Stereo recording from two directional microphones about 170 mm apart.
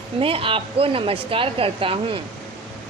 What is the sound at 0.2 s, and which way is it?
Speech, 30° right (ahead or behind).